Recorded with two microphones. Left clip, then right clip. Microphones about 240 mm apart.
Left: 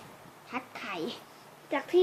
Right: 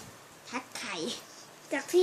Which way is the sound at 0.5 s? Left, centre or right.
Centre.